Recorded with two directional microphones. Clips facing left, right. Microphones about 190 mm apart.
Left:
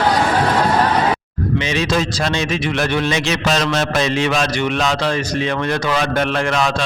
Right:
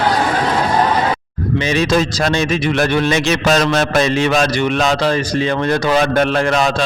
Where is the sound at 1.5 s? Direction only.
45° right (ahead or behind).